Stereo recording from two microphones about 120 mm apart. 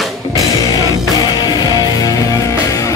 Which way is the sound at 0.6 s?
35° left (ahead or behind).